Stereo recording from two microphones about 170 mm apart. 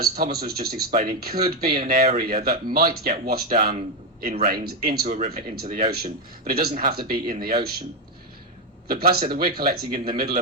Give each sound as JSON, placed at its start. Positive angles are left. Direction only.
{"t": 0.0, "sound": "speech", "side_deg": -65}
{"t": 8.9, "sound": "speech", "side_deg": -60}